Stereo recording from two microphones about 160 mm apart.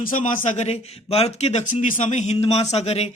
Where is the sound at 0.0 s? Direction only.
60° left (ahead or behind).